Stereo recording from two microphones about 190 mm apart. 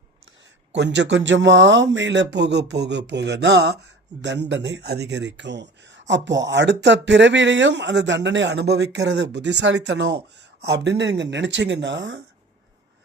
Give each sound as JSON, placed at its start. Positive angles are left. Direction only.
{"t": 0.8, "sound": "speech", "side_deg": -70}